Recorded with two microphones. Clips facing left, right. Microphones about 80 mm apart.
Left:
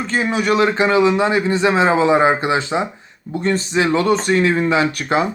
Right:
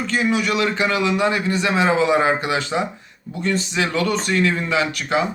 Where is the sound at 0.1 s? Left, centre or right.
Left.